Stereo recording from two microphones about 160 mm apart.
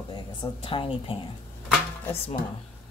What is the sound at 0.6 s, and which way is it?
Speech, 35° left (ahead or behind).